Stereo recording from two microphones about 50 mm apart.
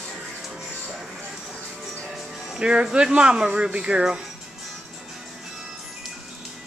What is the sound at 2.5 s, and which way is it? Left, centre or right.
Speech, centre.